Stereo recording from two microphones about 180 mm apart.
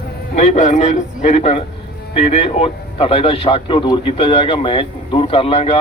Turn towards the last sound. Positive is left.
turn(degrees=35)  # may be behind; listen again after turning